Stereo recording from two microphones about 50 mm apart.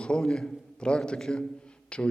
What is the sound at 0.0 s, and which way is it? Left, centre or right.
A man's voice, centre.